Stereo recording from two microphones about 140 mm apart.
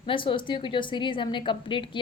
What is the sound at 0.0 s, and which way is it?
A woman's voice, 40° left (ahead or behind).